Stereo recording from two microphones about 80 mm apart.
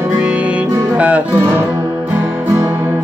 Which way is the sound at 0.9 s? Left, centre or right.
Centre.